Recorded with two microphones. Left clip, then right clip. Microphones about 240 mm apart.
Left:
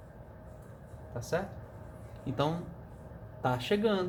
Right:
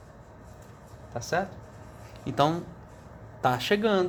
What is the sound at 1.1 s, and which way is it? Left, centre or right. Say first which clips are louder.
Speech: right 5 dB; right.